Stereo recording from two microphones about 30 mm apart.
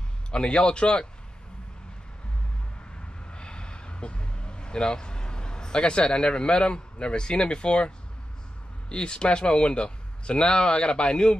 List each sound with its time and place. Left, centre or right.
0.3 s speech: left
3.3 s vehicle: left
8.8 s speech: left